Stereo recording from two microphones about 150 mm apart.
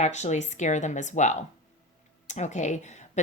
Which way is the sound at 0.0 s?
50° left (ahead or behind).